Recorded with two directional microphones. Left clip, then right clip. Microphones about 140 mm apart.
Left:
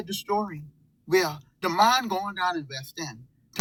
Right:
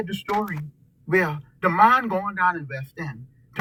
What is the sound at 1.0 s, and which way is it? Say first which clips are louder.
A woman's voice: right 2 dB; 20° left (ahead or behind).